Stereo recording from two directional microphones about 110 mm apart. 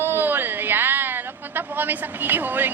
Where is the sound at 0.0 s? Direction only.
20° right (ahead or behind).